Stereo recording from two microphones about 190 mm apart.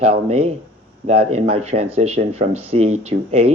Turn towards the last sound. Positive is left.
turn(degrees=-35)  # may be behind; listen again after turning